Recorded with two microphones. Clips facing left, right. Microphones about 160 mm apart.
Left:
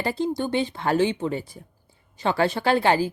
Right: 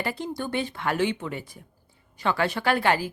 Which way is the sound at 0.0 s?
30° left (ahead or behind).